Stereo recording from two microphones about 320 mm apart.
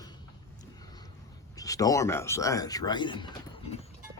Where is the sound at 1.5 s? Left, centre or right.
Centre.